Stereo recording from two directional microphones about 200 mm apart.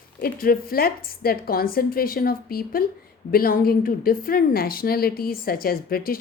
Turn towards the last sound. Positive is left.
turn(degrees=50)  # may be behind; listen again after turning